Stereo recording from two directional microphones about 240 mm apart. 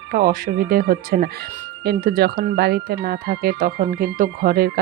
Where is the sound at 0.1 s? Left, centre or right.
Right.